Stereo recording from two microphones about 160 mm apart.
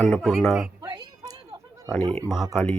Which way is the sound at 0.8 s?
25° right (ahead or behind).